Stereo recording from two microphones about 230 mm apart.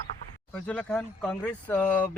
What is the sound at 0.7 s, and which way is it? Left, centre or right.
Speech, centre.